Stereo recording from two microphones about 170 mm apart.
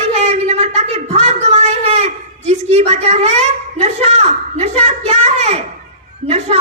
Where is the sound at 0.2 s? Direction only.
40° right (ahead or behind).